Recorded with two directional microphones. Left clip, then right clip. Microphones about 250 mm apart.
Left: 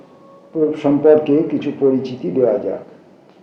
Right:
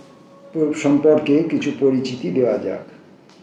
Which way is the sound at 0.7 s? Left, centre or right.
Centre.